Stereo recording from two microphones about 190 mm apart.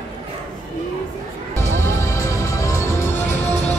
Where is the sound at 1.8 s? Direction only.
15° left (ahead or behind).